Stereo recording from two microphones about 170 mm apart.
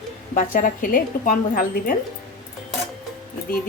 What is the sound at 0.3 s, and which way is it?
Speech, 55° left (ahead or behind).